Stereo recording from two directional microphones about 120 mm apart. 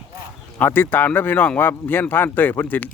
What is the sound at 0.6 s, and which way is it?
A man's voice, 15° left (ahead or behind).